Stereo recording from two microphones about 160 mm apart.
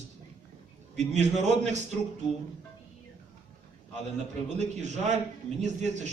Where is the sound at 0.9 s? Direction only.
45° right (ahead or behind).